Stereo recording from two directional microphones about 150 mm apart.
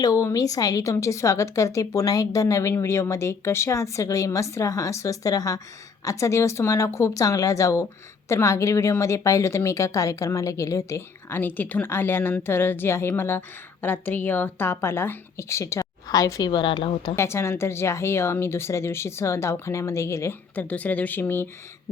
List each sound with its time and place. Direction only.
0.0 s a woman's voice: 20° left (ahead or behind)
17.2 s speech: 15° left (ahead or behind)